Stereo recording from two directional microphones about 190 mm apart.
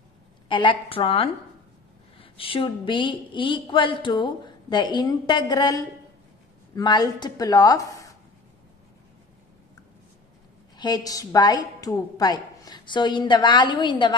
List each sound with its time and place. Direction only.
0.5 s a woman's voice: 25° left (ahead or behind)
10.8 s a woman's voice: 20° left (ahead or behind)